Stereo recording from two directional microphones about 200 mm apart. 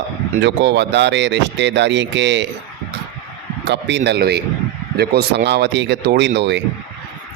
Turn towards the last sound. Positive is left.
turn(degrees=-60)  # may be behind; listen again after turning